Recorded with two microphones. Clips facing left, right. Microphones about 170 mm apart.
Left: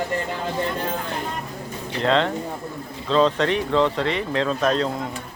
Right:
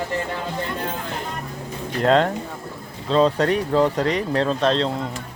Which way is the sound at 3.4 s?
35° right (ahead or behind).